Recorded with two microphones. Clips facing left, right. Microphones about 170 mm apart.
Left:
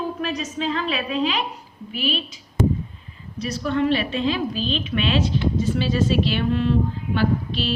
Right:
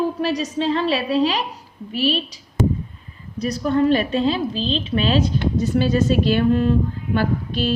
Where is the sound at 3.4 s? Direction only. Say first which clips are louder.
Right 4 dB; 40° right (ahead or behind).